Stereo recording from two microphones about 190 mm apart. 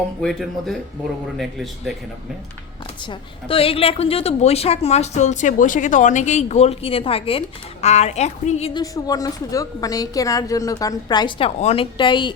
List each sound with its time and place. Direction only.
0.2 s speech: 5° left (ahead or behind)
2.8 s a woman's voice: 25° left (ahead or behind)
8.8 s a woman's voice: 20° left (ahead or behind)